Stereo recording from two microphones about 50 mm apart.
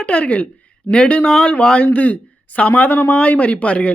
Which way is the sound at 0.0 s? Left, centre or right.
Left.